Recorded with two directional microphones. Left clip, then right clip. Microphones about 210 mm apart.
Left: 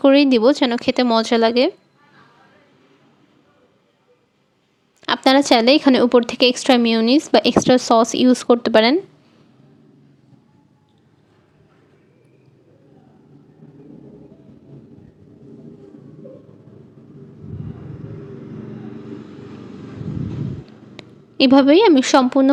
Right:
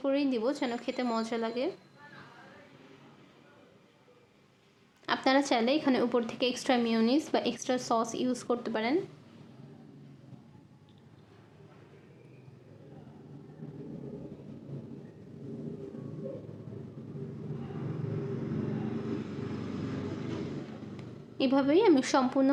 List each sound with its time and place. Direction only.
0.0 s speech: 45° left (ahead or behind)
5.0 s speech: 40° left (ahead or behind)
20.9 s a woman's voice: 45° left (ahead or behind)